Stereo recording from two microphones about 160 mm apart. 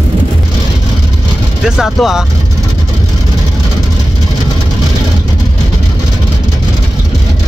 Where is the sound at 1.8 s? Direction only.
Centre (ahead or behind).